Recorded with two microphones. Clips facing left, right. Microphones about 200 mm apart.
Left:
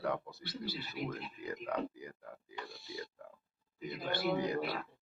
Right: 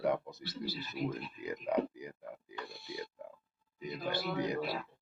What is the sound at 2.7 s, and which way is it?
Speech, 60° right (ahead or behind).